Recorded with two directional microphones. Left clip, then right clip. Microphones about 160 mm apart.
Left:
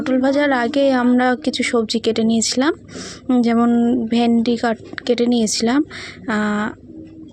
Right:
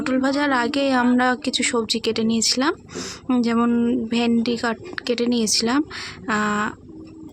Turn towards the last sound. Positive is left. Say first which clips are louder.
# left 1 dB
turn(degrees=25)  # may be behind; listen again after turning